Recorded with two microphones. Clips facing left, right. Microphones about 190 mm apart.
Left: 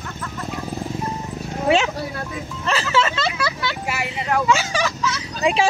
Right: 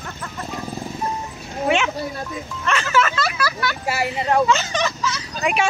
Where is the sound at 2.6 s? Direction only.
30° left (ahead or behind).